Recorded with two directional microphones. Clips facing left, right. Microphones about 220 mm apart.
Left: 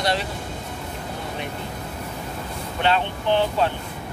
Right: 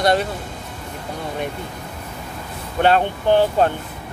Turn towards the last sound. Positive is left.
turn(degrees=-50)  # may be behind; listen again after turning